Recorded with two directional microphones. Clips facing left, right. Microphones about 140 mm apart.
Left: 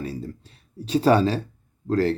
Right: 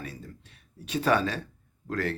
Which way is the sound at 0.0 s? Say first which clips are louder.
Left 9 dB; 35° left (ahead or behind).